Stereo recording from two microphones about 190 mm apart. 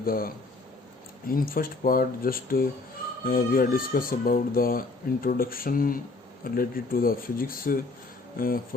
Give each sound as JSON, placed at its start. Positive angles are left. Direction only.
{"t": 0.0, "sound": "speech", "side_deg": 50}